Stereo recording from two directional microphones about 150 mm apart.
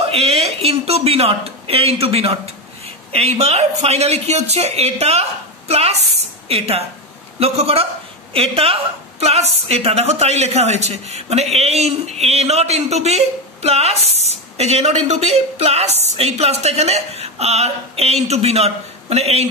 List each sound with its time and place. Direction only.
0.1 s a woman's voice: 40° right (ahead or behind)